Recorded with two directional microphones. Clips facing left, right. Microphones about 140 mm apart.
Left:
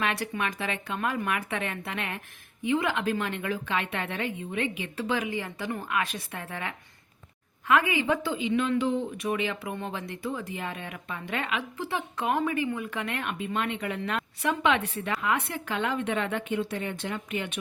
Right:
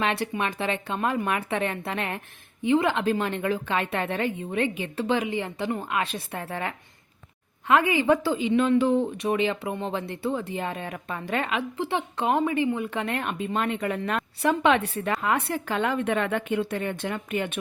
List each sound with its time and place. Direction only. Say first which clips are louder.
0.0 s speech: right 3 dB; 25° right (ahead or behind); by 9.0 s 45° right (ahead or behind)
9.1 s speech: right 5 dB; 30° right (ahead or behind)
11.8 s speech: right 4 dB; 25° right (ahead or behind); by 17.6 s 50° right (ahead or behind)